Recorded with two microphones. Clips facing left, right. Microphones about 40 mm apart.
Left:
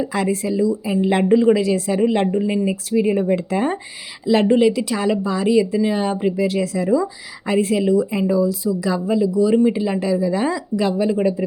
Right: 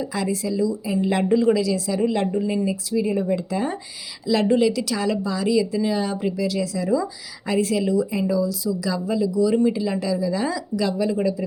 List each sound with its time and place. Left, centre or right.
0.0 s a woman's voice: left
2.6 s speech: left
4.3 s speech: left